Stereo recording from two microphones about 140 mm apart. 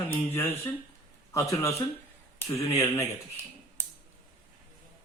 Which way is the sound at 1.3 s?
20° left (ahead or behind).